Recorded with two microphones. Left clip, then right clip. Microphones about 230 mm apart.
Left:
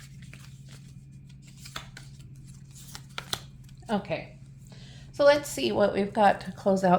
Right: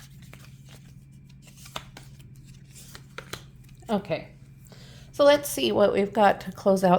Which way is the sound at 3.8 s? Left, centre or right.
Right.